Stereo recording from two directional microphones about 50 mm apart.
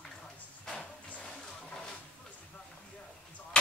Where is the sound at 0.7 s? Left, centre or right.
Centre.